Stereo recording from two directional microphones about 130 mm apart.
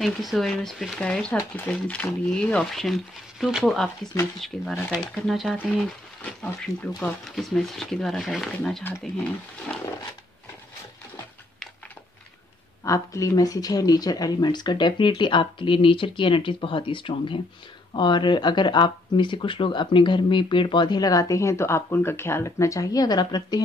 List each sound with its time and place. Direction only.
0.0 s speech: centre (ahead or behind)
12.8 s speech: 25° left (ahead or behind)